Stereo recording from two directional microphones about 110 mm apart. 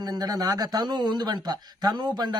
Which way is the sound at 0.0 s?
35° right (ahead or behind).